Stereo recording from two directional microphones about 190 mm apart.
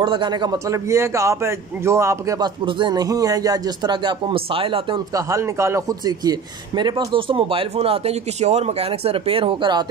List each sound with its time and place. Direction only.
0.0 s a man's voice: 25° right (ahead or behind)